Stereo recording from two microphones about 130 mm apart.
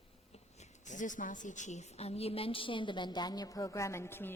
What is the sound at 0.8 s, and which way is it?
A woman's voice, 75° left (ahead or behind).